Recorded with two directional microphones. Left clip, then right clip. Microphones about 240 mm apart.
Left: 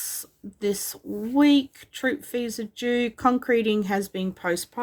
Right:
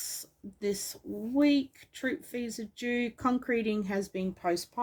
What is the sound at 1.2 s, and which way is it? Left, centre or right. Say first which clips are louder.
Speech: left 7 dB; left.